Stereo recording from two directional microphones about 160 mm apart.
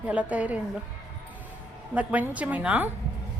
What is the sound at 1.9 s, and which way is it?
Speech, 10° right (ahead or behind).